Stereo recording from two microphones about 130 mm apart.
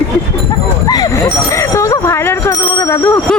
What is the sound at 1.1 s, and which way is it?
A woman's voice, 20° left (ahead or behind).